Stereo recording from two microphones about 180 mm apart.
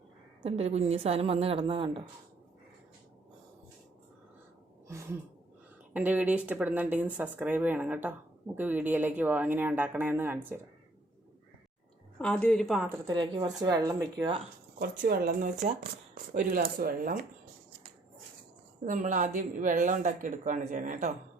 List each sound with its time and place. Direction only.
0.4 s a woman's voice: 35° right (ahead or behind)
4.9 s a sound: 15° right (ahead or behind)
5.9 s speech: 10° right (ahead or behind)
12.2 s a woman's voice: 5° left (ahead or behind)
13.1 s speech: 25° right (ahead or behind)
14.8 s speech: 55° right (ahead or behind)
18.9 s speech: 45° right (ahead or behind)